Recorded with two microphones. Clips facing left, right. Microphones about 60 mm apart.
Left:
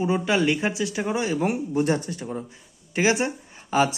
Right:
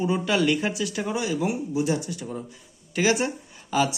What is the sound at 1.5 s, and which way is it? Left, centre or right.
Speech, left.